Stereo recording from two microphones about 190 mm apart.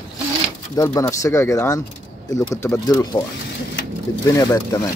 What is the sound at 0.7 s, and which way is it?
Speech, 15° left (ahead or behind).